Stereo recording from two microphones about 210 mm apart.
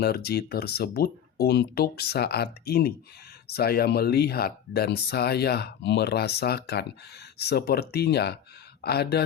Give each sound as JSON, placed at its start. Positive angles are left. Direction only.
{"t": 0.0, "sound": "speech", "side_deg": 50}